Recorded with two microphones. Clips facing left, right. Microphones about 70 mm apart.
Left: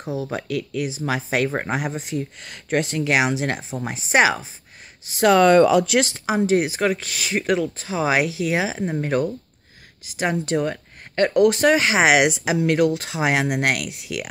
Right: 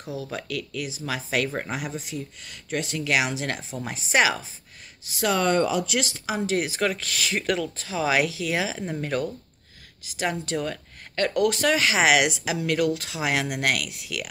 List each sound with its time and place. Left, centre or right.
0.0 s speech: left
5.2 s speech: left
5.9 s speech: left